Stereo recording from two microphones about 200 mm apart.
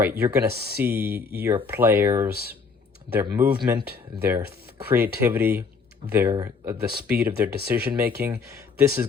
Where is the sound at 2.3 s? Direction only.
50° right (ahead or behind).